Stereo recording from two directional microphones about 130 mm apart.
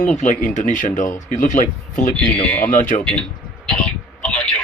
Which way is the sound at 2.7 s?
90° left.